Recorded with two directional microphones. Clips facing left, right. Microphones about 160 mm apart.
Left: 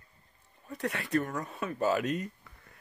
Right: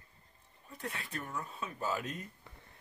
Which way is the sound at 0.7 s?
75° left (ahead or behind).